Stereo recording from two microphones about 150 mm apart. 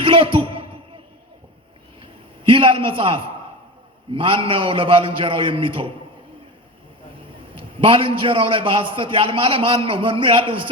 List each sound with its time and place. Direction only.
0.0 s basketball bounce: 35° right (ahead or behind)
2.0 s a sound: 35° right (ahead or behind)
4.1 s a man's voice: 35° right (ahead or behind)
7.5 s a man's voice: 35° right (ahead or behind)